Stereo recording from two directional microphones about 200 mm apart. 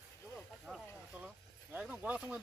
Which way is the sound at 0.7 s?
Centre (ahead or behind).